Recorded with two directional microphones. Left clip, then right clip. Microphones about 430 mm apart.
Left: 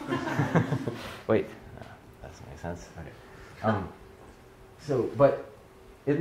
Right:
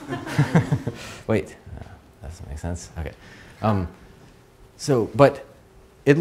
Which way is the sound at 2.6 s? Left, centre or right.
Right.